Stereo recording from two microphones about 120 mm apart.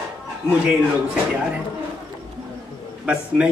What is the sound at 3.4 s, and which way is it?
Speech, 10° right (ahead or behind).